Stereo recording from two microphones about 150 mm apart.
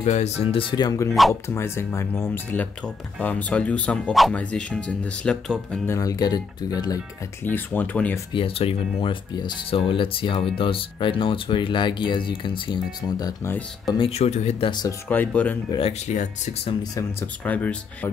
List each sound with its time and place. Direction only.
0.0 s speech: 45° left (ahead or behind); by 5.8 s 5° left (ahead or behind)
5.9 s speech: 25° left (ahead or behind)
7.4 s speech: 10° left (ahead or behind)
8.3 s speech: 35° left (ahead or behind)
13.4 s speech: 15° left (ahead or behind)
13.8 s speech: 35° left (ahead or behind)
14.7 s speech: 25° left (ahead or behind)
15.0 s speech: 10° left (ahead or behind)
15.7 s speech: 30° left (ahead or behind)
16.1 s speech: 50° left (ahead or behind)
17.5 s speech: 10° left (ahead or behind)